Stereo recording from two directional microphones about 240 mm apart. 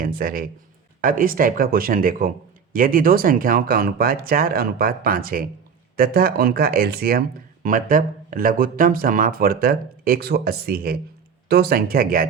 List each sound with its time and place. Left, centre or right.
0.0 s speech: right